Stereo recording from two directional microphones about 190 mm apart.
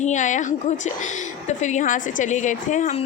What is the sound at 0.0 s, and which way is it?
Speech, 40° left (ahead or behind).